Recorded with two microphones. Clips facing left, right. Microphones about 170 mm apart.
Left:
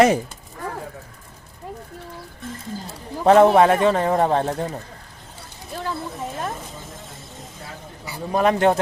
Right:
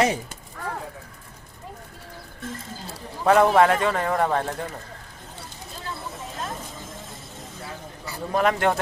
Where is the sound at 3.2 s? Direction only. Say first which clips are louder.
Left 4 dB; 30° left (ahead or behind).